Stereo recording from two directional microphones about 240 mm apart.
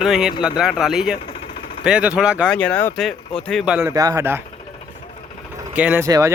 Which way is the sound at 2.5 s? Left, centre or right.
Centre.